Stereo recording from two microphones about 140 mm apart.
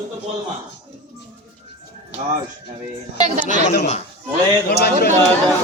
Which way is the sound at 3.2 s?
55° right (ahead or behind).